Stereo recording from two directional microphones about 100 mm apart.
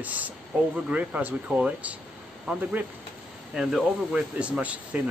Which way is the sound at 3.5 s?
5° right (ahead or behind).